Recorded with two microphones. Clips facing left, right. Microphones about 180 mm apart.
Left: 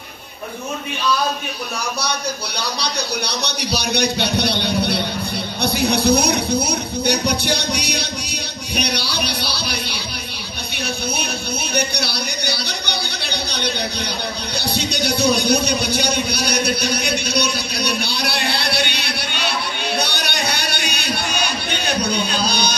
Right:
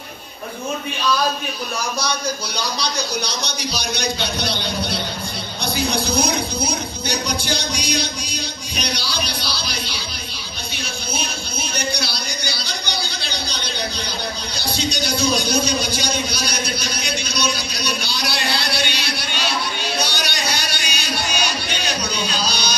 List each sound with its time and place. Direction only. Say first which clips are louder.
2.8 s speech: left 1 dB; 65° left (ahead or behind)
11.7 s speech: left 3 dB; 65° left (ahead or behind)
20.0 s a sound: left 1 dB; 60° left (ahead or behind)